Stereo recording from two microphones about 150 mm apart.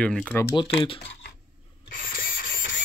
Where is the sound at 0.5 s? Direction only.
35° left (ahead or behind).